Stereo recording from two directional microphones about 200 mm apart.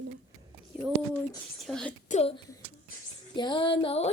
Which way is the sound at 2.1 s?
30° left (ahead or behind).